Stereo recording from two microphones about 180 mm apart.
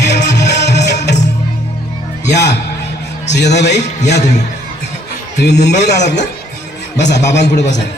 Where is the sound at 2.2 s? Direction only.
70° left (ahead or behind).